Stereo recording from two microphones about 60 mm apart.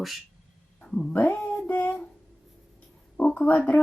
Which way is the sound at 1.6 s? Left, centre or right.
Left.